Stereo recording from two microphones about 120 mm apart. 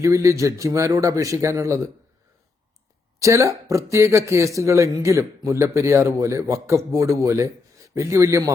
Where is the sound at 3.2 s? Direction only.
25° right (ahead or behind).